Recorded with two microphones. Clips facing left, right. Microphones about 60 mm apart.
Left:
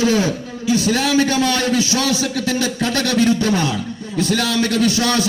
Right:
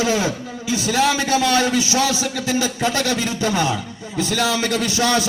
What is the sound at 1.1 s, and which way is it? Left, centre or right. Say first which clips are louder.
Speech: left 3 dB; left.